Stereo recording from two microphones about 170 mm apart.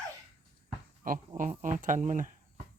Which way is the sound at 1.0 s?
55° right (ahead or behind).